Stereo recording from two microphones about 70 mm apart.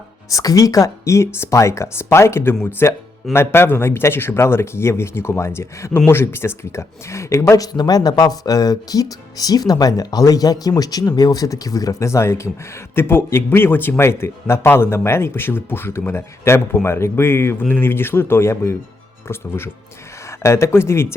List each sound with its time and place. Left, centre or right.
0.3 s speech: left
7.5 s speech: left